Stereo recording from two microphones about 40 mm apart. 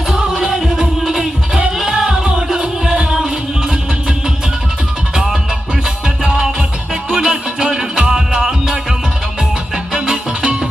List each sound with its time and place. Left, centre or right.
0.1 s music: centre
5.1 s music: centre